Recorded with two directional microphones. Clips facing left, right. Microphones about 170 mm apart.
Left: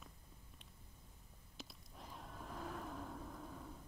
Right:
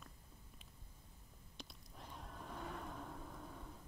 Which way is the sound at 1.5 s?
Centre (ahead or behind).